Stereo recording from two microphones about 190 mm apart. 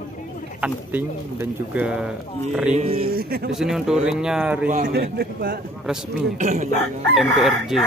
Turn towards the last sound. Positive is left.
turn(degrees=0)  # may be behind; listen again after turning